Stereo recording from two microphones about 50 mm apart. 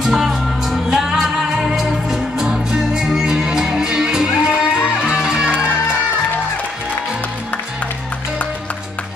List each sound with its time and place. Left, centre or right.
0.0 s music: centre